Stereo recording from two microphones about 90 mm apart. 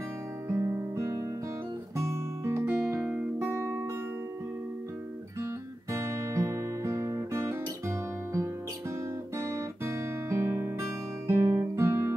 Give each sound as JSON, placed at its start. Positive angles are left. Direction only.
{"t": 0.5, "sound": "guitar", "side_deg": -30}
{"t": 3.1, "sound": "music", "side_deg": -25}
{"t": 5.4, "sound": "guitar", "side_deg": -30}